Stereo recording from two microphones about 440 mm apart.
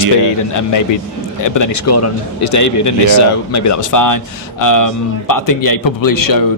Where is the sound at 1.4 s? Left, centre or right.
Left.